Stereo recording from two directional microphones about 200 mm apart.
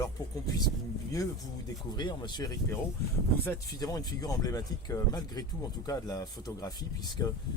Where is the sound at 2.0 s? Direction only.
20° left (ahead or behind).